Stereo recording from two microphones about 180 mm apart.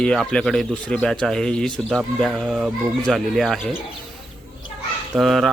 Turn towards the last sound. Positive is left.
turn(degrees=0)  # may be behind; listen again after turning